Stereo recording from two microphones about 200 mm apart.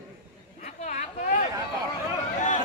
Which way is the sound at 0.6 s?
35° left (ahead or behind).